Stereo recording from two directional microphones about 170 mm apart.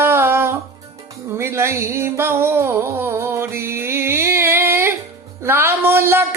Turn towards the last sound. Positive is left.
turn(degrees=-15)  # may be behind; listen again after turning